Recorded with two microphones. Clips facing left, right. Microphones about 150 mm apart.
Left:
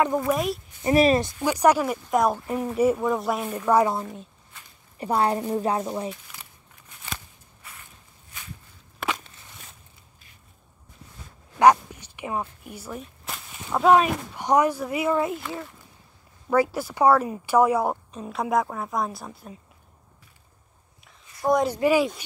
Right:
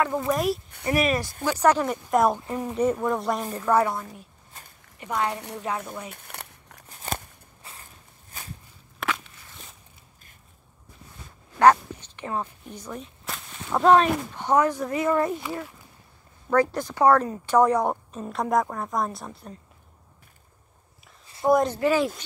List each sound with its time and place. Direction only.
0.3 s speech: centre (ahead or behind)
0.8 s speech: 25° left (ahead or behind)
1.4 s speech: 15° left (ahead or behind)
3.5 s speech: 15° left (ahead or behind)
3.9 s speech: 25° left (ahead or behind)
4.9 s speech: 35° left (ahead or behind)
6.1 s crumpling: 60° right (ahead or behind)
6.9 s a sound: 40° right (ahead or behind)
8.3 s walk: 35° right (ahead or behind)
11.5 s speech: 10° left (ahead or behind)
15.4 s speech: 5° right (ahead or behind)
16.4 s speech: 10° left (ahead or behind)
21.6 s speech: 10° left (ahead or behind)